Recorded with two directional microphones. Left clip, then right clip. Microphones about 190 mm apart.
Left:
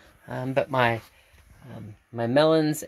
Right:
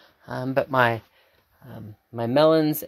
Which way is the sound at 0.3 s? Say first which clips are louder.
Right 2 dB; 5° right (ahead or behind).